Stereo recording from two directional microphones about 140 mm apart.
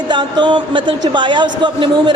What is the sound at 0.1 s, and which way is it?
A man's voice, 35° right (ahead or behind).